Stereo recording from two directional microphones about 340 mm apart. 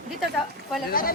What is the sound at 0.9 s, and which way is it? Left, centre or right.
Speech, left.